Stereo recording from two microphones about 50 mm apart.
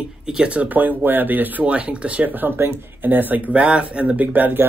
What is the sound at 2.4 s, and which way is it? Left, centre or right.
Speech, right.